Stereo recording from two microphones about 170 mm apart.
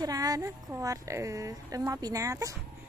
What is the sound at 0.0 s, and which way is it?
Speech, 20° right (ahead or behind).